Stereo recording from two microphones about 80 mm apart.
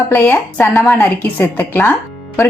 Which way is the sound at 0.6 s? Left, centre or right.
Left.